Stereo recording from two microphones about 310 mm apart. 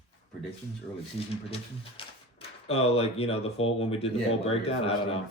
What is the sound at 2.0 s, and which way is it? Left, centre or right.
Speech, centre.